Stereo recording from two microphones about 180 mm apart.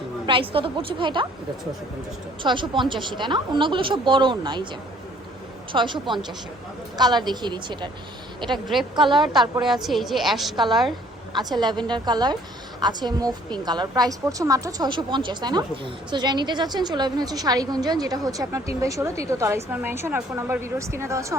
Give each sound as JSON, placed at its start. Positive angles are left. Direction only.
{"t": 0.3, "sound": "a woman's voice", "side_deg": -30}
{"t": 2.4, "sound": "a woman's voice", "side_deg": -25}
{"t": 5.7, "sound": "a woman's voice", "side_deg": -25}
{"t": 8.5, "sound": "a woman's voice", "side_deg": 0}
{"t": 9.0, "sound": "a woman's voice", "side_deg": -25}
{"t": 9.3, "sound": "a woman's voice", "side_deg": 0}
{"t": 11.3, "sound": "a woman's voice", "side_deg": -25}